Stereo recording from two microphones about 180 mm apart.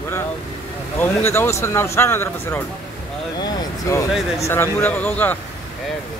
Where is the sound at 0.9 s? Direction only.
15° left (ahead or behind).